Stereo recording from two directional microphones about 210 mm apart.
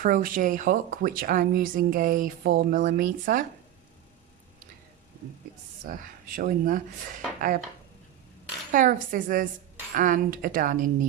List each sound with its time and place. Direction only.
0.0 s speech: 40° right (ahead or behind)
5.8 s speech: 40° right (ahead or behind)
8.7 s speech: 40° right (ahead or behind)